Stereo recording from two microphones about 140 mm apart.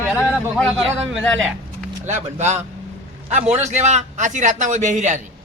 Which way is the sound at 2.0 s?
55° right (ahead or behind).